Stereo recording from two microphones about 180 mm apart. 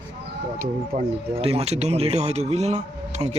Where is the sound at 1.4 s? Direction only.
35° right (ahead or behind).